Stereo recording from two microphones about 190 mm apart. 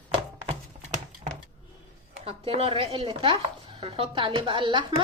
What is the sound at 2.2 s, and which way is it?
Speech, 30° right (ahead or behind).